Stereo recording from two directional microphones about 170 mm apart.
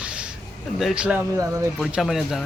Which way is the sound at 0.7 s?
5° right (ahead or behind).